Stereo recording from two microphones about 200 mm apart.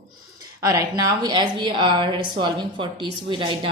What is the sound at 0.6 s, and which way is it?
Speech, 15° right (ahead or behind).